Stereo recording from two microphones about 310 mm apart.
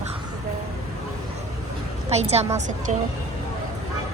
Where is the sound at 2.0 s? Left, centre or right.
Right.